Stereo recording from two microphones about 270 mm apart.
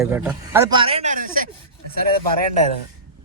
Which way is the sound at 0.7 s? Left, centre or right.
Centre.